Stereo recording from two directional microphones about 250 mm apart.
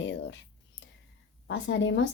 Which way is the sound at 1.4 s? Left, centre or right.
Left.